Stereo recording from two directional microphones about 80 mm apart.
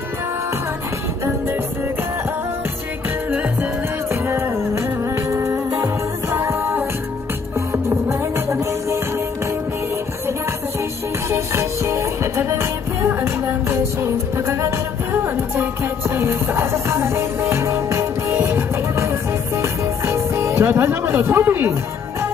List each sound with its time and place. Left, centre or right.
4.1 s music: right
11.2 s music: right